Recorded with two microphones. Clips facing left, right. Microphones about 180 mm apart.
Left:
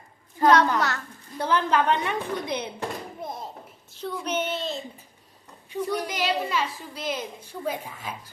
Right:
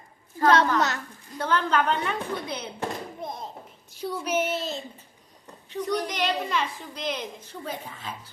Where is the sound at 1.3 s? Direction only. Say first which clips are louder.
Left 1 dB; 15° left (ahead or behind).